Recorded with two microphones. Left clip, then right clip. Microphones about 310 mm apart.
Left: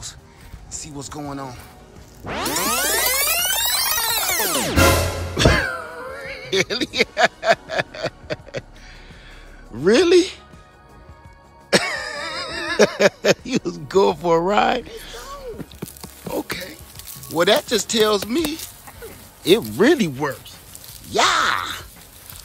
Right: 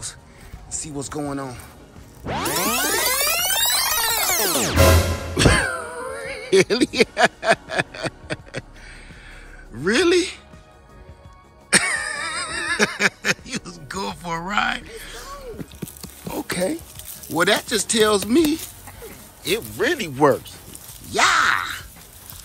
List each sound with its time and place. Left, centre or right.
0.7 s speech: centre
2.3 s music: centre
9.8 s speech: centre
11.7 s a sound: centre
17.3 s speech: centre
19.5 s speech: centre
21.1 s groan: centre